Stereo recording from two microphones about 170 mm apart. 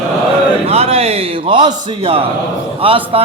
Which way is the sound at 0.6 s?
35° right (ahead or behind).